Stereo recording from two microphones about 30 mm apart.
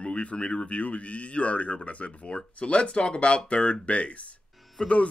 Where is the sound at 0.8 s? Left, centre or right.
Left.